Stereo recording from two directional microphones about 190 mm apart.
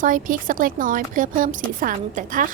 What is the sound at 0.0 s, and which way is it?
A woman's voice, 45° right (ahead or behind).